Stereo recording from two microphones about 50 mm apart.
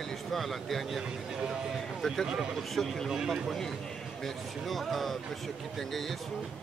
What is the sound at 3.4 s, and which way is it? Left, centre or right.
Speech, centre.